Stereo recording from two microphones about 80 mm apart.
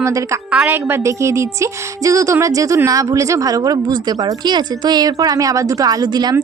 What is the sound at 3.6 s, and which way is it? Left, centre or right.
A woman's voice, right.